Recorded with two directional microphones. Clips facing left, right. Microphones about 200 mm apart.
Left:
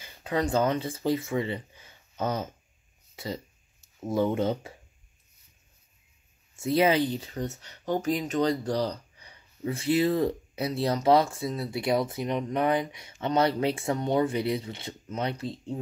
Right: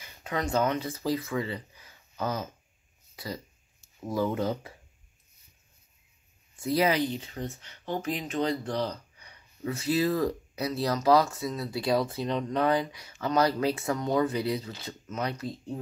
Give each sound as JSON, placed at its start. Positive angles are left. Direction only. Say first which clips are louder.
{"t": 0.0, "sound": "speech", "louder": "left 4 dB", "side_deg": 30}
{"t": 4.0, "sound": "speech", "louder": "left 3 dB", "side_deg": 25}
{"t": 6.5, "sound": "speech", "louder": "left 3 dB", "side_deg": 25}